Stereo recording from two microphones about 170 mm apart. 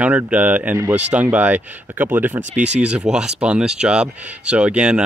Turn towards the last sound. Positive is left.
turn(degrees=-5)  # may be behind; listen again after turning